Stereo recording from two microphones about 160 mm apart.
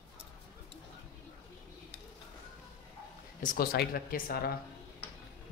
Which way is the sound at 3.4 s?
65° left (ahead or behind).